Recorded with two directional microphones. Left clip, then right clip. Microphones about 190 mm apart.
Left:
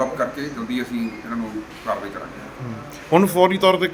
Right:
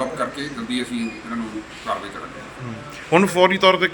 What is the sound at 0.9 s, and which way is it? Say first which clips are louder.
Speech: even; 40° left (ahead or behind).